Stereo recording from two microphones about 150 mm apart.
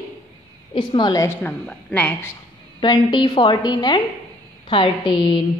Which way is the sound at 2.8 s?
30° left (ahead or behind).